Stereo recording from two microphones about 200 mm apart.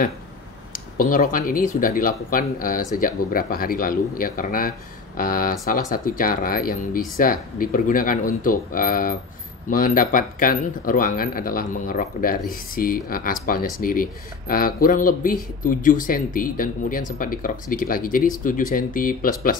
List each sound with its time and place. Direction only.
0.7 s speech: 45° left (ahead or behind)